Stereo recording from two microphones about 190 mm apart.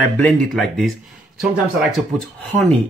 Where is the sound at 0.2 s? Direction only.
Centre (ahead or behind).